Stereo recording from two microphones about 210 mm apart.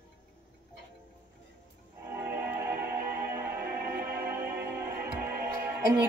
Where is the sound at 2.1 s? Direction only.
10° right (ahead or behind).